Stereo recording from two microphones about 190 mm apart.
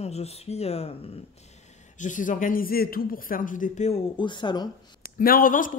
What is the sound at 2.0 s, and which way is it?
A man's voice, 40° left (ahead or behind).